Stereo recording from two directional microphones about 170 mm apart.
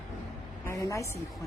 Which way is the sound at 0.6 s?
15° left (ahead or behind).